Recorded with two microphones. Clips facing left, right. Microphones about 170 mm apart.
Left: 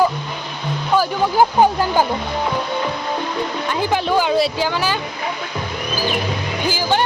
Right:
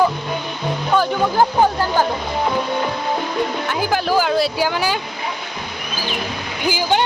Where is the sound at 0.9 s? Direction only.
10° left (ahead or behind).